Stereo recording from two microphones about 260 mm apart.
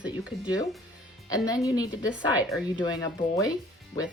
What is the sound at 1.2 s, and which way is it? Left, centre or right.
Speech, centre.